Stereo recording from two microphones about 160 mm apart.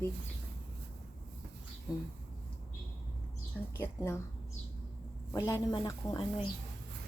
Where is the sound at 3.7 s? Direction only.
15° left (ahead or behind).